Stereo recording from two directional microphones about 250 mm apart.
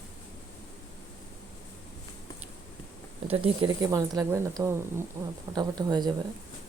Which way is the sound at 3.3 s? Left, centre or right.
Right.